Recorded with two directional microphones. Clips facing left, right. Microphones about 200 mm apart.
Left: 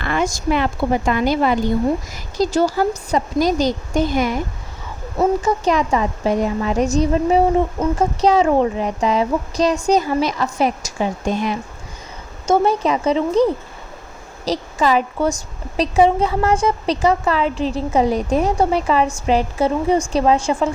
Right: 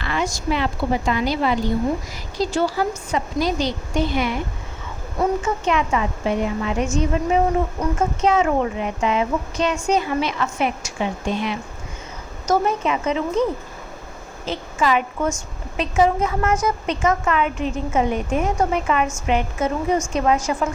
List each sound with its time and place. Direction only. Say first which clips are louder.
0.0 s a woman's voice: left 4 dB; 50° left (ahead or behind)
5.4 s a woman's voice: left 4 dB; 40° left (ahead or behind)